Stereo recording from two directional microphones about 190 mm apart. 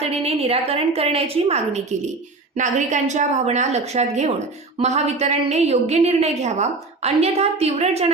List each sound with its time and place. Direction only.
0.0 s a woman's voice: 30° right (ahead or behind)